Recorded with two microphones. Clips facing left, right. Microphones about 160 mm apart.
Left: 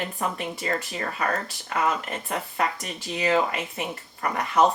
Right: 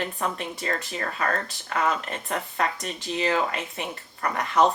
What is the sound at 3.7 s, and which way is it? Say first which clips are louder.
Speech: left 2 dB; 20° left (ahead or behind).